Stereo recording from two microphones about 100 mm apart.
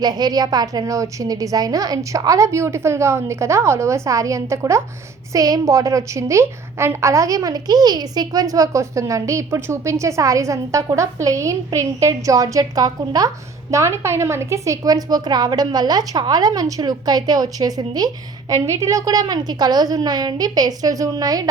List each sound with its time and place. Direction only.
0.0 s a woman's voice: 40° right (ahead or behind)